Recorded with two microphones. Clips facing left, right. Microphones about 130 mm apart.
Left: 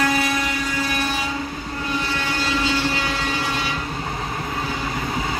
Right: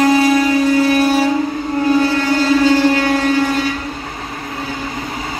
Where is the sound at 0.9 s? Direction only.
40° right (ahead or behind).